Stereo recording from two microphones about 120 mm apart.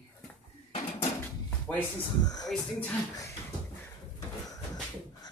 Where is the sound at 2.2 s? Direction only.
35° left (ahead or behind).